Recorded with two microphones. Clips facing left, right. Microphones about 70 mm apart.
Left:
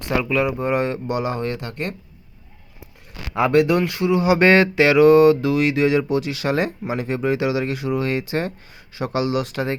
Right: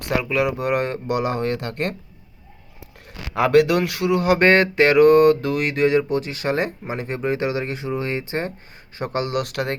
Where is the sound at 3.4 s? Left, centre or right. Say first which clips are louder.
Right 1 dB; right.